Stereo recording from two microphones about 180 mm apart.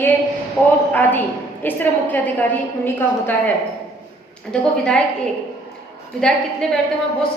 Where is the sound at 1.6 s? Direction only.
10° left (ahead or behind).